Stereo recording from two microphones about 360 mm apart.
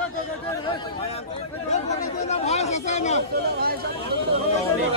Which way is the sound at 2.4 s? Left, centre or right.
Centre.